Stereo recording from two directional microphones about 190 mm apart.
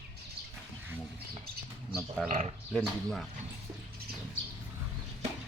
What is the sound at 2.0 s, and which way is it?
Speech, 5° left (ahead or behind).